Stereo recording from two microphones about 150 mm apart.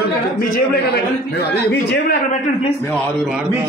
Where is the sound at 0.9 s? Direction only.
90° left.